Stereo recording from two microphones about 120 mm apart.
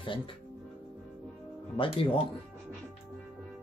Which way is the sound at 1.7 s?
50° left (ahead or behind).